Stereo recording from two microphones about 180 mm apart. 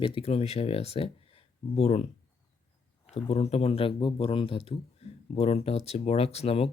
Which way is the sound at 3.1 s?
35° left (ahead or behind).